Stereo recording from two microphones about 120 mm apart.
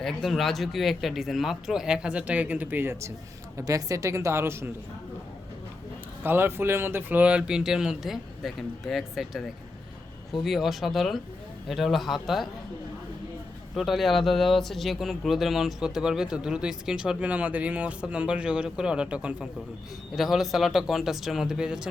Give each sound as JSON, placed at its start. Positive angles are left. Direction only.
{"t": 0.0, "sound": "a woman's voice", "side_deg": 0}
{"t": 6.2, "sound": "speech", "side_deg": -20}
{"t": 10.4, "sound": "speech", "side_deg": 0}
{"t": 13.7, "sound": "speech", "side_deg": 0}